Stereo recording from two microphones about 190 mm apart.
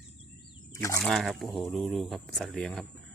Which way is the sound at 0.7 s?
15° left (ahead or behind).